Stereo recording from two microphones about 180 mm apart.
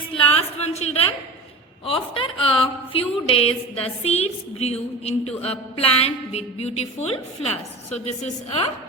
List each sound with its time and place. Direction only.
0.1 s a woman's voice: 30° left (ahead or behind)